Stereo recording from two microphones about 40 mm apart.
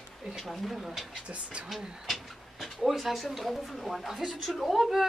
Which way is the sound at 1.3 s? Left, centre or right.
Right.